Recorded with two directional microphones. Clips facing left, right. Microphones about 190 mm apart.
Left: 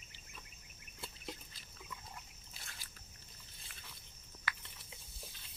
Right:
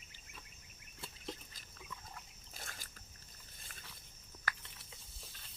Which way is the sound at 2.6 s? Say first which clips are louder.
Right 5 dB; 45° right (ahead or behind).